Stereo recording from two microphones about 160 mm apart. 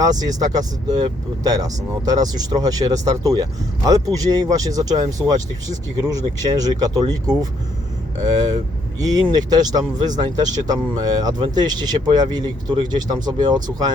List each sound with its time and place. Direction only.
0.0 s speech: 25° right (ahead or behind)
6.1 s speech: 25° right (ahead or behind)
9.0 s speech: 25° right (ahead or behind)